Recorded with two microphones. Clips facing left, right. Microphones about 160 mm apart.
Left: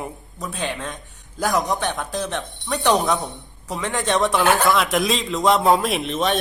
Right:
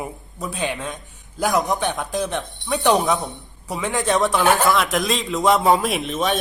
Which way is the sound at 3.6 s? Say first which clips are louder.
Right 1 dB; 15° right (ahead or behind).